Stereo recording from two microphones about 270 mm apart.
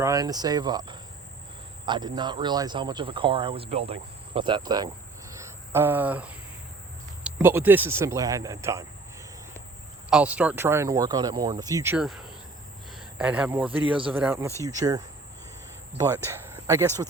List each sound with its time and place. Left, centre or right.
0.0 s speech: centre
10.1 s speech: centre